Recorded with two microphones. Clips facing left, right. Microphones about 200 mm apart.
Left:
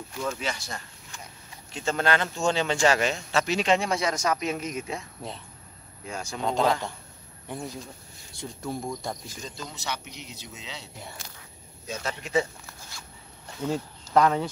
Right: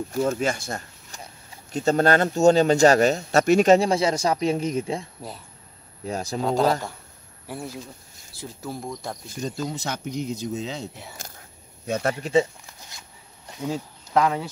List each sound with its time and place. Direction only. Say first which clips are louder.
0.1 s speech: right 7 dB; 45° right (ahead or behind)
6.0 s speech: right 7 dB; 35° right (ahead or behind)
6.4 s speech: right 3 dB; 5° right (ahead or behind)
9.4 s speech: right 8 dB; 45° right (ahead or behind)
11.1 s a sound: right 3 dB; 45° right (ahead or behind)
12.2 s speech: right 4 dB; 30° right (ahead or behind)
13.5 s speech: even; 15° right (ahead or behind)